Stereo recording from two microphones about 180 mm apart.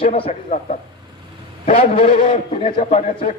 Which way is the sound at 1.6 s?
45° left (ahead or behind).